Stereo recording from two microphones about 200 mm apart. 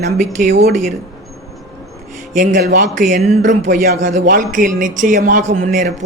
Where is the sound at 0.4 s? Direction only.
50° right (ahead or behind).